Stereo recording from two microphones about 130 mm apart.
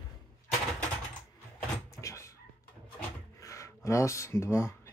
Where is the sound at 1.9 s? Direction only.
25° left (ahead or behind).